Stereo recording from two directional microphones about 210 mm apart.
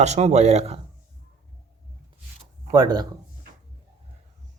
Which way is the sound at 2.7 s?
20° right (ahead or behind).